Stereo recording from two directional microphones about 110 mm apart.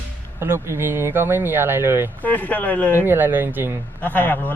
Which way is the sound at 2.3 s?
15° left (ahead or behind).